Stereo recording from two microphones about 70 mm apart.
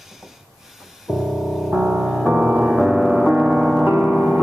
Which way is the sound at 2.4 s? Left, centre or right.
Centre.